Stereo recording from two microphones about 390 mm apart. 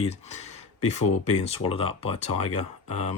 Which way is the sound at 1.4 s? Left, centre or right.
Centre.